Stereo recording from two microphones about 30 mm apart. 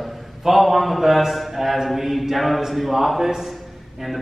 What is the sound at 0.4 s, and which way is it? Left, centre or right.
A man's voice, centre.